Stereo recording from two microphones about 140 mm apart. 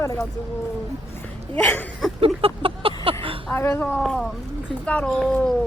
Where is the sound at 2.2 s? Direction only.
40° right (ahead or behind).